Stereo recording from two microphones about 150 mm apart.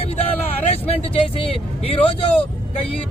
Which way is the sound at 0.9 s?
40° left (ahead or behind).